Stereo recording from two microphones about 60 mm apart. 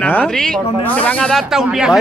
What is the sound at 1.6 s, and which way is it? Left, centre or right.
Speech, centre.